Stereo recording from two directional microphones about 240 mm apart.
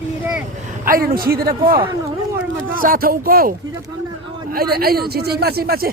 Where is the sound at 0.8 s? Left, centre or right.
Right.